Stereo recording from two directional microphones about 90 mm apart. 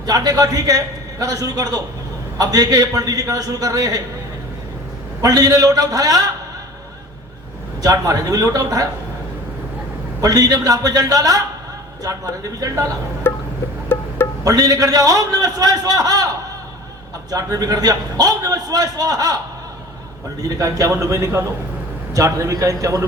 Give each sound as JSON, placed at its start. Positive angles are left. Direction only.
{"t": 0.0, "sound": "a man's voice", "side_deg": -45}
{"t": 5.2, "sound": "a man's voice", "side_deg": -45}
{"t": 7.8, "sound": "speech", "side_deg": -45}
{"t": 10.2, "sound": "a man's voice", "side_deg": -45}
{"t": 13.2, "sound": "a sound", "side_deg": 25}
{"t": 13.8, "sound": "music", "side_deg": 25}
{"t": 14.4, "sound": "a man's voice", "side_deg": -40}
{"t": 17.3, "sound": "a man's voice", "side_deg": -45}
{"t": 20.4, "sound": "speech", "side_deg": -40}